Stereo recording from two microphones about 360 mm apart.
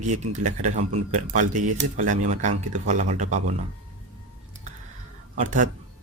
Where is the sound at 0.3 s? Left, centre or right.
Centre.